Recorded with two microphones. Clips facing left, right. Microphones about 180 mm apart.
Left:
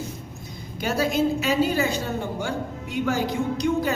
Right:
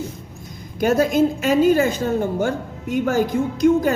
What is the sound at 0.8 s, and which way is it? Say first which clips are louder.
A woman's voice: right 6 dB; 50° right (ahead or behind).